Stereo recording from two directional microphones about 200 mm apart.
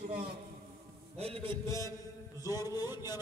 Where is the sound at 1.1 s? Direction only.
30° right (ahead or behind).